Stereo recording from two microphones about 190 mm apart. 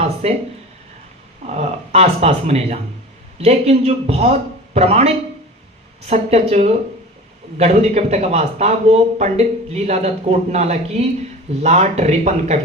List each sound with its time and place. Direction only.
0.2 s speech: 35° right (ahead or behind)
1.5 s speech: 35° right (ahead or behind)